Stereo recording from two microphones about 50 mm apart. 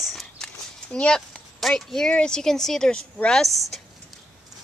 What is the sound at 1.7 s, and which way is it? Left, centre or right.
A woman's voice, centre.